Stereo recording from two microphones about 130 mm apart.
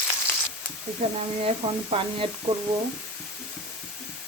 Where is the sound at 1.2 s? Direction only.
50° right (ahead or behind).